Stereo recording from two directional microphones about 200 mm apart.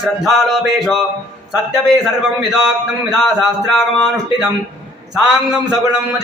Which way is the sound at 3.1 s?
Centre (ahead or behind).